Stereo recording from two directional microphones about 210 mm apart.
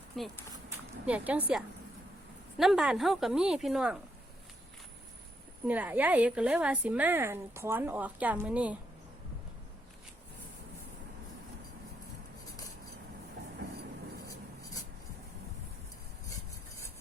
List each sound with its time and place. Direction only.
0.1 s a woman's voice: centre (ahead or behind)
5.6 s speech: 10° right (ahead or behind)